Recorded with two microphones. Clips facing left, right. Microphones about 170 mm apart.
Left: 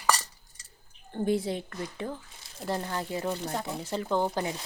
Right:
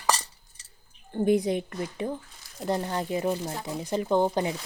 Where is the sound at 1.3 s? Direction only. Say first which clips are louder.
Right 5 dB; 15° right (ahead or behind).